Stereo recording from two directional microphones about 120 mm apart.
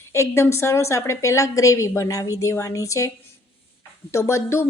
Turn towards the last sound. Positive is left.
turn(degrees=20)  # may be behind; listen again after turning